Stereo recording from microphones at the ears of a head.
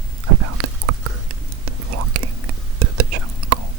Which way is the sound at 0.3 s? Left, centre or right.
Right.